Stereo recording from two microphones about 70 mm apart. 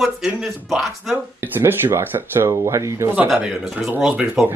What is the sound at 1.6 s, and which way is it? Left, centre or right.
Speech, right.